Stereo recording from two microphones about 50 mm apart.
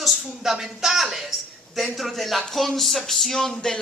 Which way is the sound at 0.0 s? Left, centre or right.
Centre.